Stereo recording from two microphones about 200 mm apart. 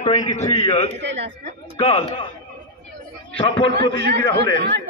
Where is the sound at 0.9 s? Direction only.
60° right (ahead or behind).